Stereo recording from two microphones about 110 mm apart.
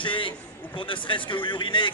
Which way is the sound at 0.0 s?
50° left (ahead or behind).